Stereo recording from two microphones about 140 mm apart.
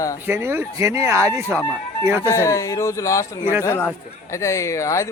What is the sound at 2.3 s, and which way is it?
A man's voice, 20° left (ahead or behind).